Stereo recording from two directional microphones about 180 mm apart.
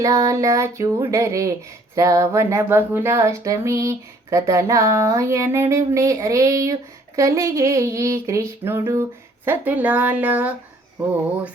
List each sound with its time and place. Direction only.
0.0 s speech: 20° right (ahead or behind)